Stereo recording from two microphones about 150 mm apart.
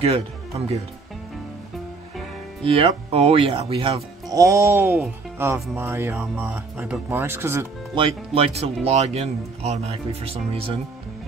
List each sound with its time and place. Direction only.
0.0 s speech: 45° right (ahead or behind)
2.6 s speech: 40° right (ahead or behind)
4.3 s speech: 20° right (ahead or behind)
8.4 s speech: 45° right (ahead or behind)